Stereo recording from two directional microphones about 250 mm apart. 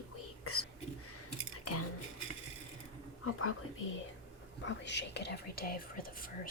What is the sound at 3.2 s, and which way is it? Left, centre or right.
Speech, left.